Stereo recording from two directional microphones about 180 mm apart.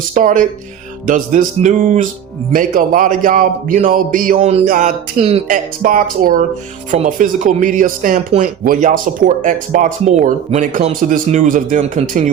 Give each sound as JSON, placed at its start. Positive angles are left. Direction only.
{"t": 0.1, "sound": "speech", "side_deg": -45}
{"t": 4.4, "sound": "speech", "side_deg": -35}
{"t": 5.5, "sound": "speech", "side_deg": -50}